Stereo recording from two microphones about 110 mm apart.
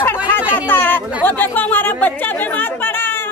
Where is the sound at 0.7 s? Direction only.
15° left (ahead or behind).